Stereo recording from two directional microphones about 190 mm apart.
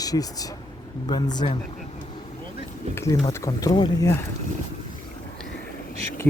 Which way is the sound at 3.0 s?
15° left (ahead or behind).